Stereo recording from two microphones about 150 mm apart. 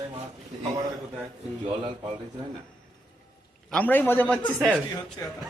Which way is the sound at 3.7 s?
10° left (ahead or behind).